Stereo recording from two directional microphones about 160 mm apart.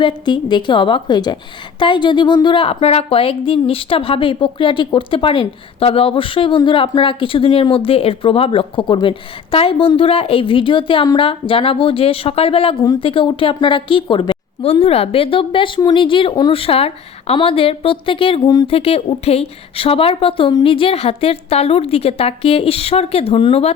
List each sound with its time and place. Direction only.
0.0 s a woman's voice: 30° left (ahead or behind)